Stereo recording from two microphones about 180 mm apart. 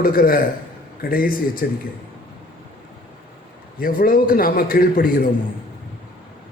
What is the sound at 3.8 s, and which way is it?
A man's voice, 50° left (ahead or behind).